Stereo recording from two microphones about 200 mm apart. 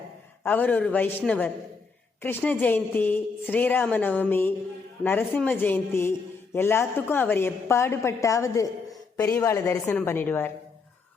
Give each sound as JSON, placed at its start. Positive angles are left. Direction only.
{"t": 0.4, "sound": "a man's voice", "side_deg": 10}